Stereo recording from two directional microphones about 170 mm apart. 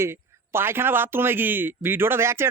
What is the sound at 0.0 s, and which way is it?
Speech, 15° right (ahead or behind).